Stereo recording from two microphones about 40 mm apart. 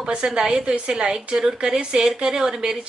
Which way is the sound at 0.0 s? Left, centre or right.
Right.